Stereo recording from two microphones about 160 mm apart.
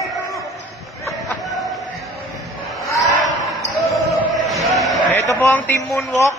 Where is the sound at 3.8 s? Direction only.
Centre (ahead or behind).